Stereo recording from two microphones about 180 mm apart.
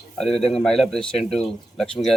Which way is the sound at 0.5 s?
Centre (ahead or behind).